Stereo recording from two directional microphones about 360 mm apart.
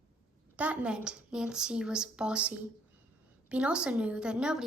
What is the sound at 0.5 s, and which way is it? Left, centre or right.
A woman's voice, centre.